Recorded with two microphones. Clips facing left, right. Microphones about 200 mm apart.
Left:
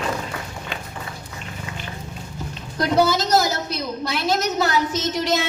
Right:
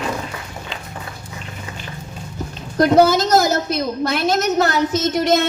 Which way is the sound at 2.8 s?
50° right (ahead or behind).